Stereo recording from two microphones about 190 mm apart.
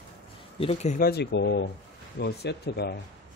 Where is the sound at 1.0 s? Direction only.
60° left (ahead or behind).